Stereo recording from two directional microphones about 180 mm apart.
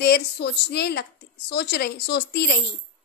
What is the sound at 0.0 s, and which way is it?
A woman's voice, 65° left (ahead or behind).